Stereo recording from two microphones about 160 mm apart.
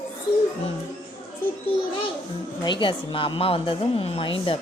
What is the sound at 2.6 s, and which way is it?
A woman's voice, 30° left (ahead or behind).